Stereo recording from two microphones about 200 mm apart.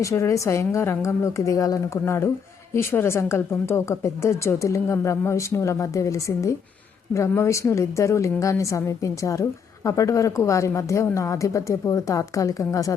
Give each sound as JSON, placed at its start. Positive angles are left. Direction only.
{"t": 0.0, "sound": "a woman's voice", "side_deg": 15}